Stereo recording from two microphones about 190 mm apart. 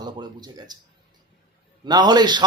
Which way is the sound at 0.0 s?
20° right (ahead or behind).